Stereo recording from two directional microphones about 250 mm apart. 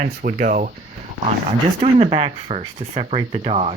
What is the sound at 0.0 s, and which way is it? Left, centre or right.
Speech, right.